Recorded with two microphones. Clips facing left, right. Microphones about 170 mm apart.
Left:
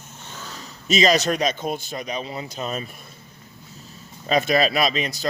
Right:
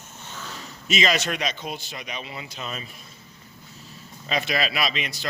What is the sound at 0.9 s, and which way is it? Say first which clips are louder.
Speech: left 5 dB; 40° left (ahead or behind).